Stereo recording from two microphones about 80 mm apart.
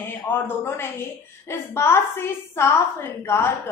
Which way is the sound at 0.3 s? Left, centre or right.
Left.